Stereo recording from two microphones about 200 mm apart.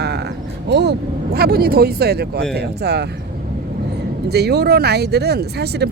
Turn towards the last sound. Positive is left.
turn(degrees=-55)  # may be behind; listen again after turning